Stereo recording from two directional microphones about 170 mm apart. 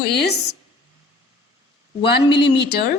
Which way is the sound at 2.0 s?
80° left.